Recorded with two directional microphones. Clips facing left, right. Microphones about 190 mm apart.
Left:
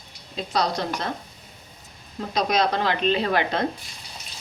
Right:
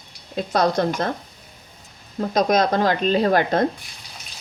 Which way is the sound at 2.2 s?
45° right (ahead or behind).